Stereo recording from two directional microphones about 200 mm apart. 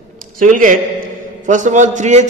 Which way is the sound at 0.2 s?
40° right (ahead or behind).